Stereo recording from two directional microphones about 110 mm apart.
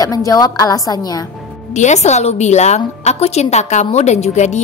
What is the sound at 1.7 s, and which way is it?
A woman's voice, 90° left.